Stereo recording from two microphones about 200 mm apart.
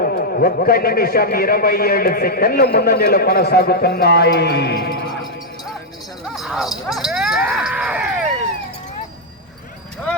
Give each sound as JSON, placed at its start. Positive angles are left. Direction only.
{"t": 0.0, "sound": "a man's voice", "side_deg": 50}
{"t": 6.2, "sound": "speech", "side_deg": 0}